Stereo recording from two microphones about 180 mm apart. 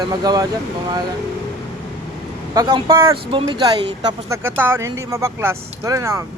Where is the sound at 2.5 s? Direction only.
25° right (ahead or behind).